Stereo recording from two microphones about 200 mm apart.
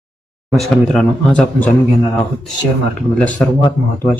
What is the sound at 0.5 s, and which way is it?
Speech, centre (ahead or behind).